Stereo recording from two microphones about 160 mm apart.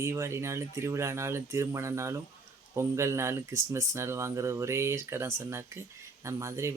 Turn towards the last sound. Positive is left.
turn(degrees=-20)  # may be behind; listen again after turning